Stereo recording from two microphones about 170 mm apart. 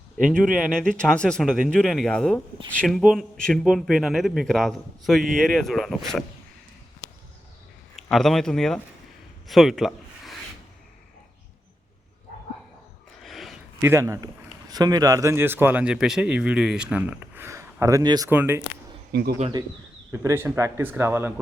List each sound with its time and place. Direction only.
0.3 s speech: centre (ahead or behind)
7.9 s speech: centre (ahead or behind)
13.2 s a sound: centre (ahead or behind)
13.8 s a man's voice: 15° right (ahead or behind)
19.1 s speech: 70° right (ahead or behind)
20.2 s speech: 15° right (ahead or behind)